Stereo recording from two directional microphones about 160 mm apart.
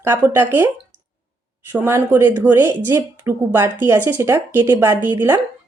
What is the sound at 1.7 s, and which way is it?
Speech, 15° right (ahead or behind).